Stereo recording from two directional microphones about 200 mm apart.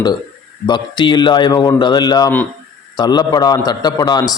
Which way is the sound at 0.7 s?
20° left (ahead or behind).